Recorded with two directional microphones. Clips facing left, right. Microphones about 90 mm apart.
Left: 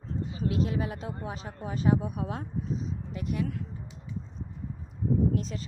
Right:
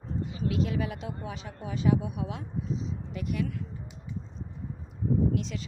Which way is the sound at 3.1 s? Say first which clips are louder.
Even; 30° left (ahead or behind).